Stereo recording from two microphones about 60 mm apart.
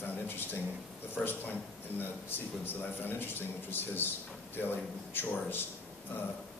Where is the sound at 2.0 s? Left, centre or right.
Left.